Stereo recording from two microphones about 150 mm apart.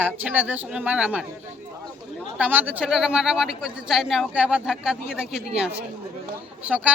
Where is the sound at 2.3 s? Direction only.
10° right (ahead or behind).